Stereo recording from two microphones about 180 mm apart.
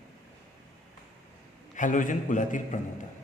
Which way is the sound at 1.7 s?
45° left (ahead or behind).